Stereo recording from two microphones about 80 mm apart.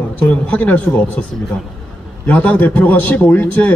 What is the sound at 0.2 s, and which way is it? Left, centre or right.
A man's voice, centre.